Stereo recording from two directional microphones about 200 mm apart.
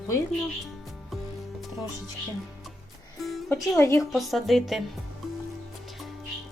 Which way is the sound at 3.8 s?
15° left (ahead or behind).